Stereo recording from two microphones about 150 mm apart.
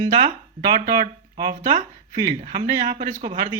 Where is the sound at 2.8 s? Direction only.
55° right (ahead or behind).